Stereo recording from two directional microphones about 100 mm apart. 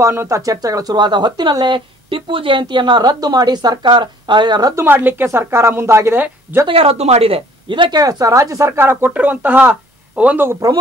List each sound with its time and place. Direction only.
0.0 s speech: 25° right (ahead or behind); by 4.7 s 45° right (ahead or behind)
4.7 s speech: 20° right (ahead or behind)
6.7 s speech: 75° right (ahead or behind); by 8.0 s 55° right (ahead or behind)
8.0 s speech: 35° right (ahead or behind); by 10.6 s 20° right (ahead or behind)